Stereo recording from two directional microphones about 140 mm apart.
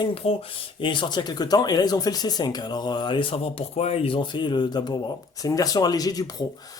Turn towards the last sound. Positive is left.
turn(degrees=25)  # may be behind; listen again after turning